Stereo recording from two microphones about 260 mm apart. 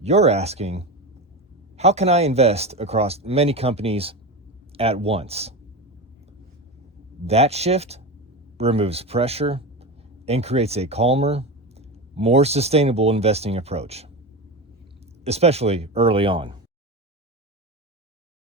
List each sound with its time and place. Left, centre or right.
0.0 s speech: right
7.3 s a man's voice: right
15.2 s speech: right